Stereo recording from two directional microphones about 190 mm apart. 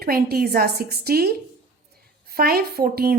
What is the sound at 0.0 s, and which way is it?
A woman's voice, 55° right (ahead or behind).